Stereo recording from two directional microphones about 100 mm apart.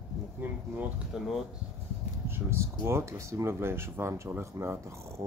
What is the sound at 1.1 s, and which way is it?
Speech, 5° right (ahead or behind).